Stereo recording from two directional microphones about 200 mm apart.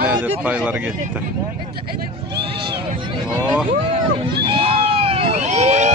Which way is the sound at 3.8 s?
25° right (ahead or behind).